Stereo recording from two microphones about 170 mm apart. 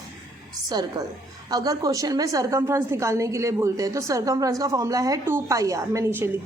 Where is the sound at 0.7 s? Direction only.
25° right (ahead or behind).